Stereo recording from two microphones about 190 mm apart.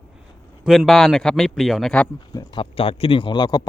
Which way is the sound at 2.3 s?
25° left (ahead or behind).